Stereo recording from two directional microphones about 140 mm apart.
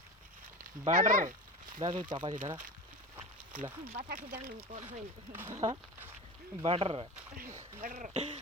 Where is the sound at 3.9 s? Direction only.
90° right.